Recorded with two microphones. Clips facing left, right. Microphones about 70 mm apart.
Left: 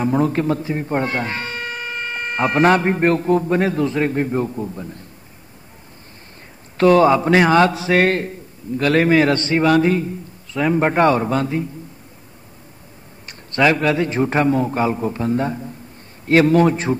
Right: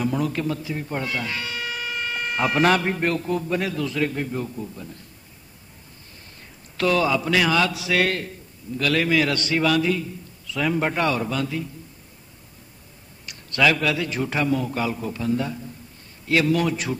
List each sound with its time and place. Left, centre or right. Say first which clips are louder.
0.0 s a man's voice: left 6 dB; left
6.8 s a man's voice: left 8 dB; left
13.3 s a man's voice: left 4 dB; left